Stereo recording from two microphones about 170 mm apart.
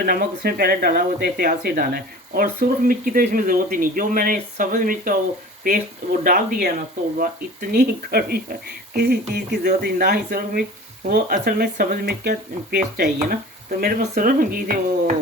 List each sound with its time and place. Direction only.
0.0 s speech: 60° right (ahead or behind)